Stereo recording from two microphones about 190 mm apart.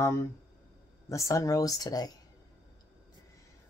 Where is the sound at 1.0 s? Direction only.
15° left (ahead or behind).